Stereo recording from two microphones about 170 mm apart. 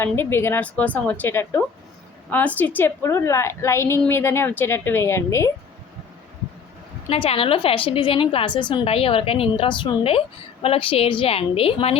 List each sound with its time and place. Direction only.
0.0 s a woman's voice: 15° left (ahead or behind)
7.1 s a woman's voice: 35° left (ahead or behind)